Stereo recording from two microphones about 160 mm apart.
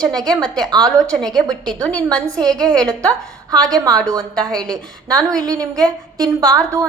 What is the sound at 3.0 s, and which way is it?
A woman's voice, 25° right (ahead or behind).